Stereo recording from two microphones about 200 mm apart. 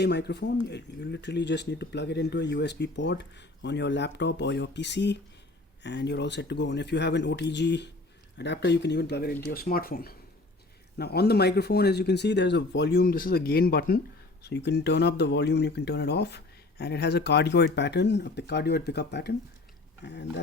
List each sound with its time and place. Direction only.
0.0 s speech: 55° left (ahead or behind)